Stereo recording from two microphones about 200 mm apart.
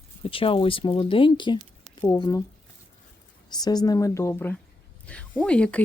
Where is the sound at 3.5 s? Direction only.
20° left (ahead or behind).